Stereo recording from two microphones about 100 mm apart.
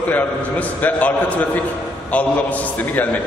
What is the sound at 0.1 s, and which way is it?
A man's voice, 15° left (ahead or behind).